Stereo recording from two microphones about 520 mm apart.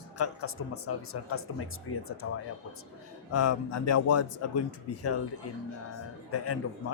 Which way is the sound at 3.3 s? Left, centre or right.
Left.